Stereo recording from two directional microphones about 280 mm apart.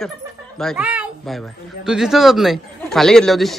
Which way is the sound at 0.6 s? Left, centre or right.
Centre.